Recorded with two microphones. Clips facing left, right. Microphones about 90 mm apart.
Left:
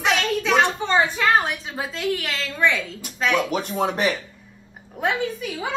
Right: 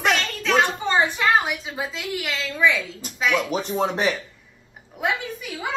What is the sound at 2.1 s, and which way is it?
Speech, centre (ahead or behind).